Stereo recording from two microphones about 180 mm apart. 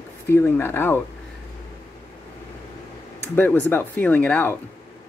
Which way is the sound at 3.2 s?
10° left (ahead or behind).